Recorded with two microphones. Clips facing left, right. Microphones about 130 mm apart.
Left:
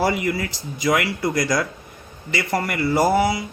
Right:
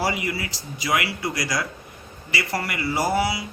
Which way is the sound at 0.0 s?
50° left (ahead or behind).